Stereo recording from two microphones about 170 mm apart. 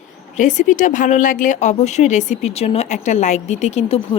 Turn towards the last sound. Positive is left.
turn(degrees=35)  # may be behind; listen again after turning